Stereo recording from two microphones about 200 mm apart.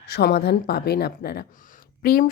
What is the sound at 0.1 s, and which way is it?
Speech, 55° left (ahead or behind).